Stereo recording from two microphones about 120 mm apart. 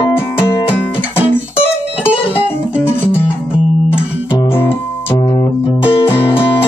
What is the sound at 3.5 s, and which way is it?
Music, 10° right (ahead or behind).